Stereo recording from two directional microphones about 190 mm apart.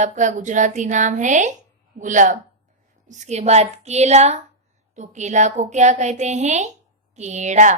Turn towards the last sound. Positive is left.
turn(degrees=-40)  # may be behind; listen again after turning